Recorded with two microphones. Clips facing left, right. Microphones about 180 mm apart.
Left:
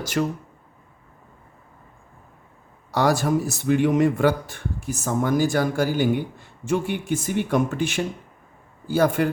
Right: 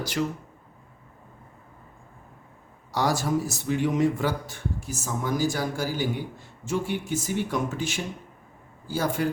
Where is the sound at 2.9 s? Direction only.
60° left (ahead or behind).